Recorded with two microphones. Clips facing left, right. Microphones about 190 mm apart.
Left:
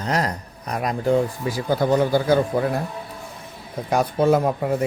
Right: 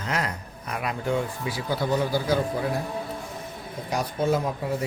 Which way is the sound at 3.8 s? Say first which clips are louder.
Left 7 dB; 55° left (ahead or behind).